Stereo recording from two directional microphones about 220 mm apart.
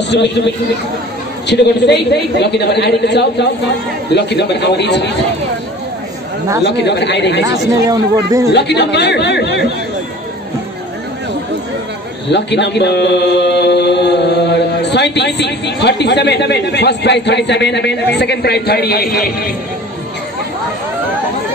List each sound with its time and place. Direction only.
0.1 s speech: 50° left (ahead or behind)
1.5 s speech: 50° left (ahead or behind)
6.6 s speech: 50° left (ahead or behind)
7.8 s speech: 15° right (ahead or behind)
8.5 s speech: 50° left (ahead or behind)
12.3 s a man's voice: 50° left (ahead or behind)